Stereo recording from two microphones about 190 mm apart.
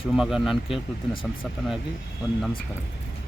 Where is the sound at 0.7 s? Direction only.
25° left (ahead or behind).